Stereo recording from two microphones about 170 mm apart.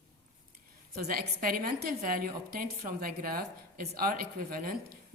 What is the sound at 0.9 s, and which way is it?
A woman's voice, 60° right (ahead or behind).